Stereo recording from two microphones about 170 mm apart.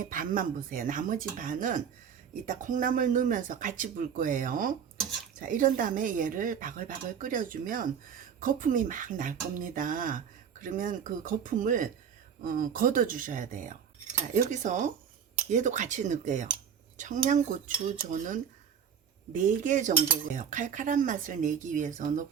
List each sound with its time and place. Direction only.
0.0 s cutlery: 55° right (ahead or behind)